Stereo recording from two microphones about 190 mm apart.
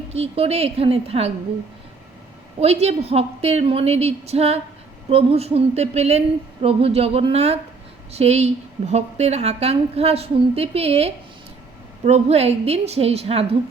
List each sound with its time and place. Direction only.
0.1 s speech: 35° right (ahead or behind)
2.6 s speech: 35° right (ahead or behind)